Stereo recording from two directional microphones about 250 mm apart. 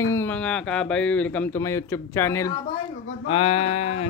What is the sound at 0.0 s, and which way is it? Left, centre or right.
Speech, centre.